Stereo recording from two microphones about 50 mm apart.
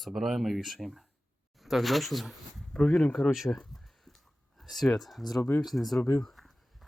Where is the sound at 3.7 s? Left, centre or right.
Centre.